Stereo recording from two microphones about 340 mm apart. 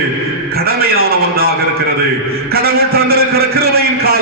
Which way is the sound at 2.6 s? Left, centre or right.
Right.